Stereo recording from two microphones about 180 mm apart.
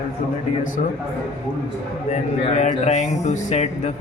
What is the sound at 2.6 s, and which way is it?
Speech, 40° left (ahead or behind).